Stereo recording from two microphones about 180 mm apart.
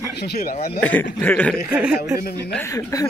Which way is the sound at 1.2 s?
10° left (ahead or behind).